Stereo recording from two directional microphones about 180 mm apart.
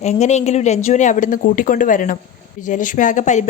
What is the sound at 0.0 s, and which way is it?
A woman's voice, 40° left (ahead or behind).